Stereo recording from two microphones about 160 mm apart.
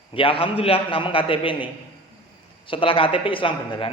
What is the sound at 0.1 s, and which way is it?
A man's voice, 35° left (ahead or behind).